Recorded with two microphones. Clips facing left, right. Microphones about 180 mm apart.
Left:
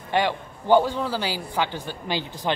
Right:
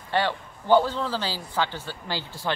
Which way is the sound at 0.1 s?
15° left (ahead or behind).